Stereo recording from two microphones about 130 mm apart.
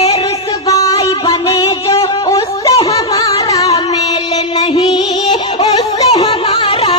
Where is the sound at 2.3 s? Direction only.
50° left (ahead or behind).